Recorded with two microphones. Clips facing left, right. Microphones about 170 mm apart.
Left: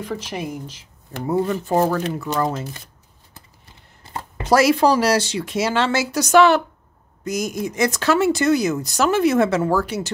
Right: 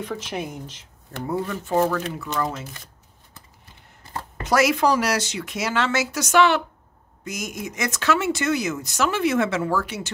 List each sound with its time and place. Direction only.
0.0 s speech: centre (ahead or behind)
1.2 s speech: 25° left (ahead or behind)
4.4 s speech: 30° left (ahead or behind)